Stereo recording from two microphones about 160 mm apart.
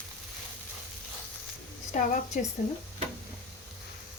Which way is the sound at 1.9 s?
50° left (ahead or behind).